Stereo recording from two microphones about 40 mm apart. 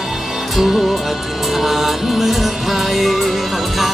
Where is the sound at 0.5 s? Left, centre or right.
Centre.